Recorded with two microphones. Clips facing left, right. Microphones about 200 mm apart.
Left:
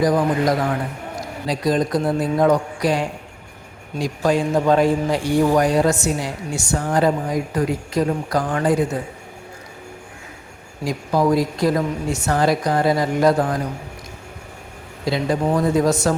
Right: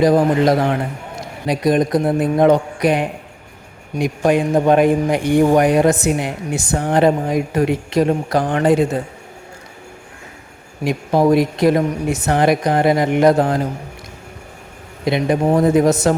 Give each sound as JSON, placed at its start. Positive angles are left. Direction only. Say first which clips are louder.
{"t": 0.0, "sound": "a man's voice", "louder": "right 4 dB", "side_deg": -25}
{"t": 10.8, "sound": "a man's voice", "louder": "right 4 dB", "side_deg": -25}
{"t": 15.0, "sound": "a man's voice", "louder": "right 4 dB", "side_deg": -20}